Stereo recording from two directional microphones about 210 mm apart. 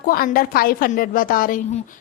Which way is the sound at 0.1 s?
45° left (ahead or behind).